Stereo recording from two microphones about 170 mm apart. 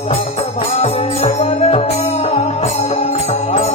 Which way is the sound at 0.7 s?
40° left (ahead or behind).